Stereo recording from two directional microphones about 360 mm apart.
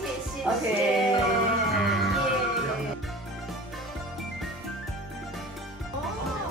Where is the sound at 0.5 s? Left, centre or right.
Centre.